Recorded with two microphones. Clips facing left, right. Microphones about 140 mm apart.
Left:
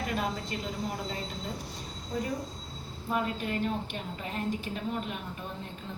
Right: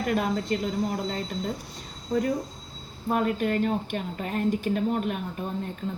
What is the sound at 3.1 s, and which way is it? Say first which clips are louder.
Speech: right 7 dB; 55° right (ahead or behind).